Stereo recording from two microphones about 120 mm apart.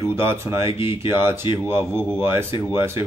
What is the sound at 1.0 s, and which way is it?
Speech, 20° right (ahead or behind).